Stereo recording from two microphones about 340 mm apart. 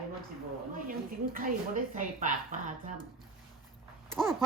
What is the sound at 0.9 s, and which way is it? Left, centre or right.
Speech, right.